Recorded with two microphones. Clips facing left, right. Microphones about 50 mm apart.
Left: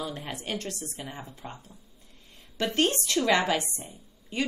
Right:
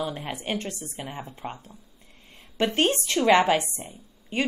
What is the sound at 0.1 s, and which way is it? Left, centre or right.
A woman's voice, right.